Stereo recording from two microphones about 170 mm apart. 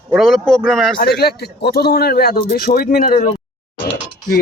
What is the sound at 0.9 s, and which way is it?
A man's voice, 70° left (ahead or behind).